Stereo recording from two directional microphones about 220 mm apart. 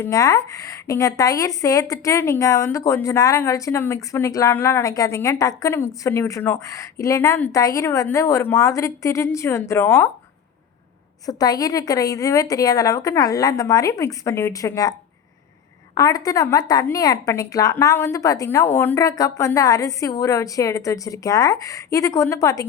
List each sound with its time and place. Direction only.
0.0 s a woman's voice: 15° left (ahead or behind)
11.3 s a woman's voice: 15° left (ahead or behind)
16.0 s a woman's voice: 15° left (ahead or behind)